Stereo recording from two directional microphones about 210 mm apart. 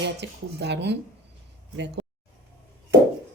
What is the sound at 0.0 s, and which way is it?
Speech, 55° right (ahead or behind).